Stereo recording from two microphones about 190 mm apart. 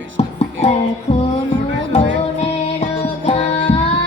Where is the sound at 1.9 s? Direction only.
35° left (ahead or behind).